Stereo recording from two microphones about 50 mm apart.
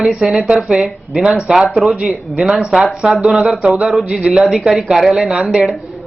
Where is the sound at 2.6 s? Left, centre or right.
Centre.